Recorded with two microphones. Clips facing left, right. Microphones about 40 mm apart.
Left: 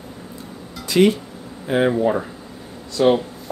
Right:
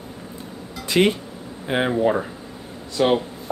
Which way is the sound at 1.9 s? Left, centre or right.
Centre.